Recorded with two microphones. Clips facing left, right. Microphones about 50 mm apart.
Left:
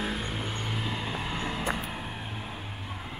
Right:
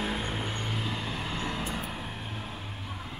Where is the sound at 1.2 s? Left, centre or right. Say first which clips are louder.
Left 1 dB; centre.